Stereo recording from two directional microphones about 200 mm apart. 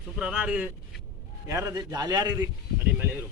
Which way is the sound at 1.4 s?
15° right (ahead or behind).